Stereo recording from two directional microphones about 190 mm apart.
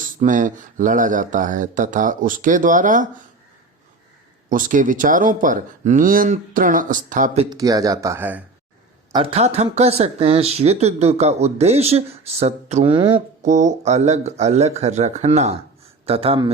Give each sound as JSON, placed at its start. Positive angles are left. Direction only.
{"t": 0.0, "sound": "speech", "side_deg": -45}
{"t": 4.4, "sound": "speech", "side_deg": -45}
{"t": 7.5, "sound": "speech", "side_deg": -20}
{"t": 9.1, "sound": "speech", "side_deg": -30}
{"t": 13.4, "sound": "speech", "side_deg": -40}